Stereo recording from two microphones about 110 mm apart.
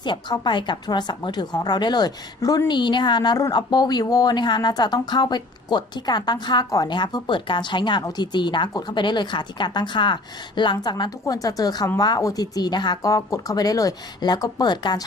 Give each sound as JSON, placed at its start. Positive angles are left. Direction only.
{"t": 0.0, "sound": "a woman's voice", "side_deg": 45}